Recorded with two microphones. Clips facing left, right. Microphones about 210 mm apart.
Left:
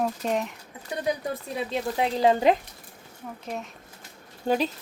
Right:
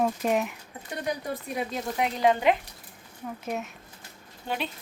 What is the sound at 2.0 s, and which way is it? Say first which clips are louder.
Speech: left 2 dB; 30° left (ahead or behind).